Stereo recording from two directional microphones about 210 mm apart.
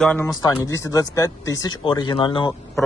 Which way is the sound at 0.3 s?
20° left (ahead or behind).